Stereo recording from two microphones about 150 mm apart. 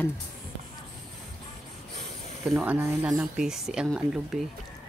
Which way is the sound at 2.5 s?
Centre (ahead or behind).